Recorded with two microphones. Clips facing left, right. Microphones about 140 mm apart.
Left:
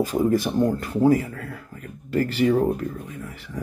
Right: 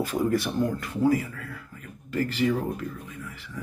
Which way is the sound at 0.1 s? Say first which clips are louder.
Left 4 dB; 30° left (ahead or behind).